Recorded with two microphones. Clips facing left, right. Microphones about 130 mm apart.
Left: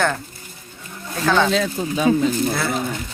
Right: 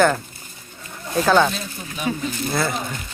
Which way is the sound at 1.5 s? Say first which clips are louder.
Left 11 dB; 90° left.